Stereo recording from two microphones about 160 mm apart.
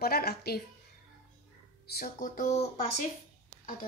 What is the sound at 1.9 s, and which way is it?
Speech, 60° left (ahead or behind).